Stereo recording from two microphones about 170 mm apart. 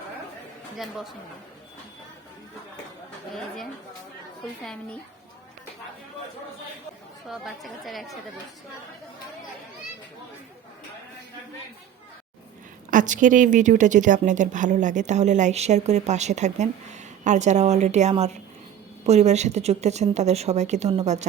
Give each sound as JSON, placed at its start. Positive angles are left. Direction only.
{"t": 7.3, "sound": "speech", "side_deg": 0}
{"t": 12.9, "sound": "a woman's voice", "side_deg": -50}